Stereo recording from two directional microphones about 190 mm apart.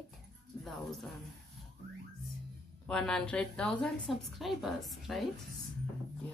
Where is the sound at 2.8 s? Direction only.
5° left (ahead or behind).